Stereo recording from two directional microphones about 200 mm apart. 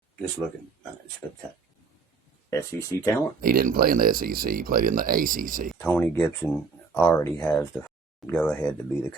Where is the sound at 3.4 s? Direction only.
45° right (ahead or behind).